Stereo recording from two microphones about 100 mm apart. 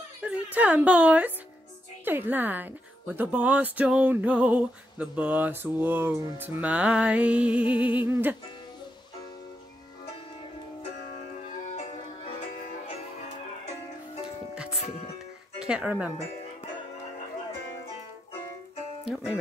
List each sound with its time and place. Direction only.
0.2 s speech: 15° right (ahead or behind)
6.7 s speech: 10° right (ahead or behind)
14.5 s music: 10° right (ahead or behind)
14.9 s music: 90° left
15.6 s speech: 10° right (ahead or behind)